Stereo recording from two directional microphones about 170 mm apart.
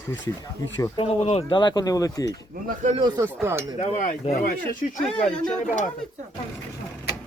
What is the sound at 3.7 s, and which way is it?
Speech, 40° left (ahead or behind).